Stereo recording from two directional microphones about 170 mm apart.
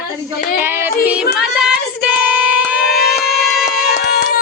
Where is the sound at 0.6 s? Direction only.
15° right (ahead or behind).